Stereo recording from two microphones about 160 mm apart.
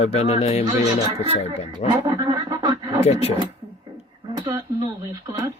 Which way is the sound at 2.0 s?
25° right (ahead or behind).